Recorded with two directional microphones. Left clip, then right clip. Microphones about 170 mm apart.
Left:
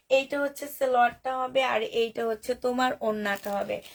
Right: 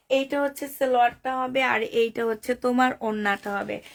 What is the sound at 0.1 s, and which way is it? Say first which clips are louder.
Speech: right 1 dB; 50° right (ahead or behind).